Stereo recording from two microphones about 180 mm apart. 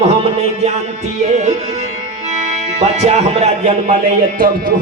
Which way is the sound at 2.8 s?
40° right (ahead or behind).